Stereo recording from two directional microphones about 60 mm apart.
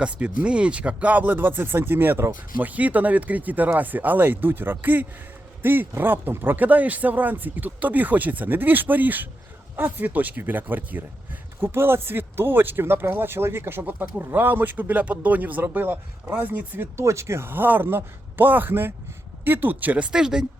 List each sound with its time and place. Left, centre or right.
0.0 s speech: right
2.6 s speech: right
17.0 s speech: right
17.5 s speech: right
20.1 s speech: centre